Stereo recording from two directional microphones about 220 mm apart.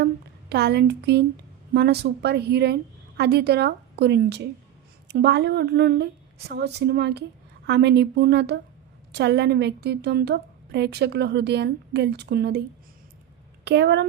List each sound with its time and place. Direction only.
0.0 s a sound: 50° right (ahead or behind)
1.7 s a woman's voice: 45° right (ahead or behind)
13.7 s a woman's voice: 50° right (ahead or behind)